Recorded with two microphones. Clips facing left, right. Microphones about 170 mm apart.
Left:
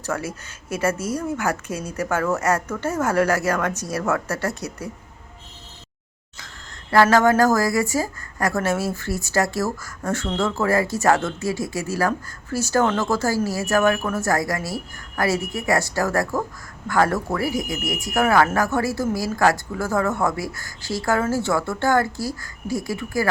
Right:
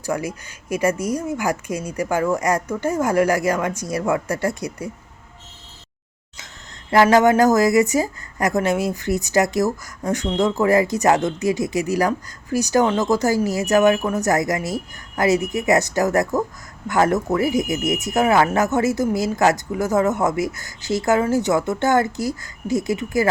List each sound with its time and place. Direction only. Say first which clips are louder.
0.0 s speech: right 3 dB; 15° right (ahead or behind)
6.9 s speech: right 2 dB; 20° right (ahead or behind)